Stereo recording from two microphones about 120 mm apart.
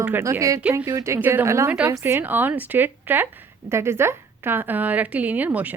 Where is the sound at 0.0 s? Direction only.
20° right (ahead or behind).